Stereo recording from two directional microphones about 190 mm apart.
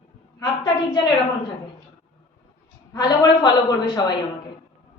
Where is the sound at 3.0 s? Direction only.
20° left (ahead or behind).